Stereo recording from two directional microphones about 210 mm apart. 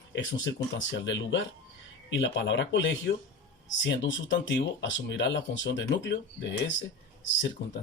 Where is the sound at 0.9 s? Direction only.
60° left (ahead or behind).